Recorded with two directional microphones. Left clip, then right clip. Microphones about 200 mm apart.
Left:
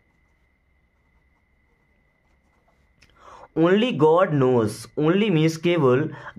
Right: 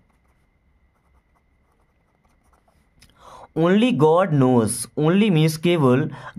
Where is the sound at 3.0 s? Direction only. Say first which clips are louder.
Right 2 dB; 35° right (ahead or behind).